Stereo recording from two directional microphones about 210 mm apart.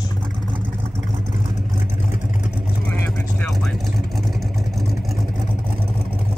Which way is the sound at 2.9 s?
10° left (ahead or behind).